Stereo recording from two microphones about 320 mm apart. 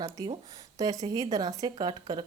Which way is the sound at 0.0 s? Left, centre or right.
Centre.